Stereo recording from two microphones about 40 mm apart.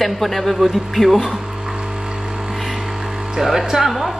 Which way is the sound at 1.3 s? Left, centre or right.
Centre.